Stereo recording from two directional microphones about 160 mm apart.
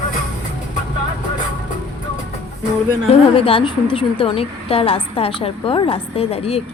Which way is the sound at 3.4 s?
35° left (ahead or behind).